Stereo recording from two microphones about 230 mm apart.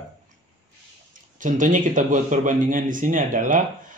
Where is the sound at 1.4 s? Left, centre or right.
Right.